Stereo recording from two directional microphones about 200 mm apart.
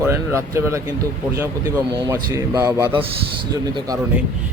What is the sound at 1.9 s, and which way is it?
Speech, 20° right (ahead or behind).